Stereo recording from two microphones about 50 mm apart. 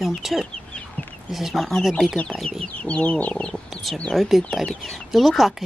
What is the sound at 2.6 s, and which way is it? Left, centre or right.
Speech, left.